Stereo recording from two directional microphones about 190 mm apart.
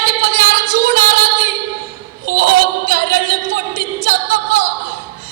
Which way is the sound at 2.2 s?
50° right (ahead or behind).